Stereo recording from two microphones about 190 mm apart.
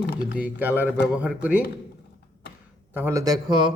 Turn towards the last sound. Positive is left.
turn(degrees=-25)  # may be behind; listen again after turning